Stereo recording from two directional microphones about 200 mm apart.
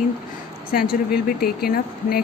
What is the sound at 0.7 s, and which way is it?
Speech, 50° left (ahead or behind).